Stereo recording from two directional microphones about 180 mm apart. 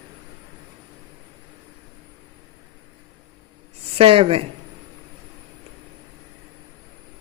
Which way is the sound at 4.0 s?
30° right (ahead or behind).